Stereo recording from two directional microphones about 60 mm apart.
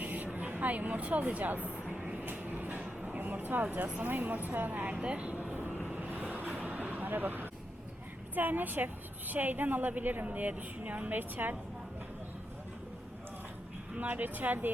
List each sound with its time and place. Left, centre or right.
0.0 s a sound: right
4.0 s a woman's voice: right
6.0 s vehicle: right
8.4 s a woman's voice: right
13.9 s a woman's voice: right